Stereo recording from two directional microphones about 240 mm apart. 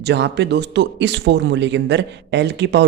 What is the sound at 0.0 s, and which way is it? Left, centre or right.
Speech, right.